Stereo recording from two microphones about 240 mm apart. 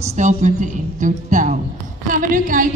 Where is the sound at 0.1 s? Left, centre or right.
Right.